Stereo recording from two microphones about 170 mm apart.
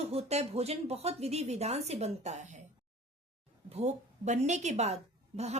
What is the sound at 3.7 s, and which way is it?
Speech, 40° right (ahead or behind).